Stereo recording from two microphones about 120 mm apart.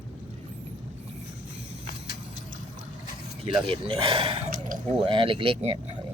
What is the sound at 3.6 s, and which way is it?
Speech, 45° right (ahead or behind).